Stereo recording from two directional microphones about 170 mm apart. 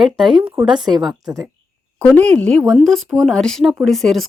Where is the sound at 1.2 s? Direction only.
20° right (ahead or behind).